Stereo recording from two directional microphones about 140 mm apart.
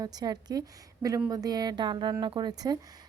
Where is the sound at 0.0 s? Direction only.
30° right (ahead or behind).